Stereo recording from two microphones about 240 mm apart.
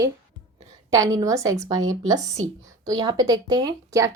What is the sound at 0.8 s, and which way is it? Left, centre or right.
Speech, centre.